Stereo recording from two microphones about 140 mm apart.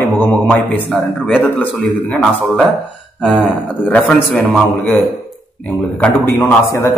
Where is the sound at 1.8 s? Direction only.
Centre (ahead or behind).